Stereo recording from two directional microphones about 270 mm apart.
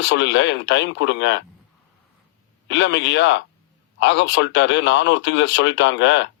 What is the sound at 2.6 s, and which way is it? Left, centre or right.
Speech, left.